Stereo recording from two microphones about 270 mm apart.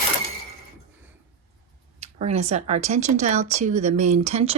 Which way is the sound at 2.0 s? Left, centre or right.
Right.